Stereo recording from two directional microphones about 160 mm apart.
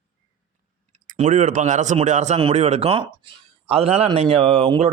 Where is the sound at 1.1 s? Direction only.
50° right (ahead or behind).